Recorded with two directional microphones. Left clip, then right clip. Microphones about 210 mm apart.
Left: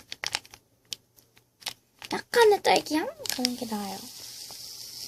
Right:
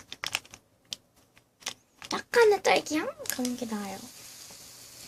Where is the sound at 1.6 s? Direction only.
25° left (ahead or behind).